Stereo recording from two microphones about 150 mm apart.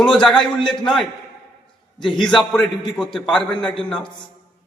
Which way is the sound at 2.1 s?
Centre (ahead or behind).